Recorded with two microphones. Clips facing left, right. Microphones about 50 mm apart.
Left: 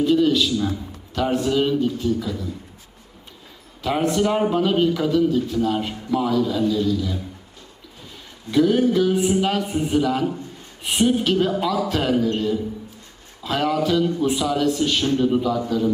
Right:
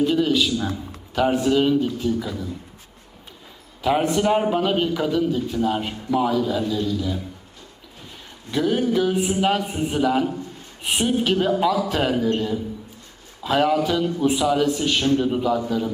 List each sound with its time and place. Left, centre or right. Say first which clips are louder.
0.0 s a man's voice: left 2 dB; centre
2.1 s a man's voice: even; centre
3.8 s a man's voice: right 1 dB; centre
8.4 s a man's voice: left 4 dB; centre